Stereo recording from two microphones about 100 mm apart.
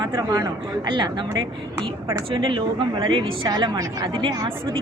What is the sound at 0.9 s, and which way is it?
Speech, 50° right (ahead or behind).